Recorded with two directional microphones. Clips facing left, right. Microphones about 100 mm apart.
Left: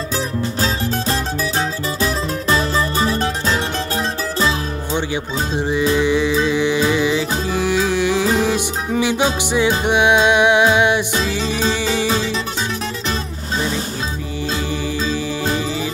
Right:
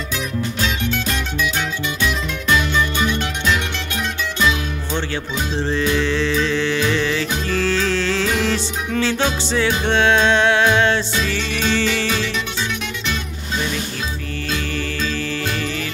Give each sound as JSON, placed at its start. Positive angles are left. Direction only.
{"t": 0.6, "sound": "music", "side_deg": 35}
{"t": 4.9, "sound": "music", "side_deg": 15}
{"t": 11.4, "sound": "music", "side_deg": 30}
{"t": 11.7, "sound": "music", "side_deg": 15}
{"t": 12.1, "sound": "music", "side_deg": 30}
{"t": 14.7, "sound": "music", "side_deg": 15}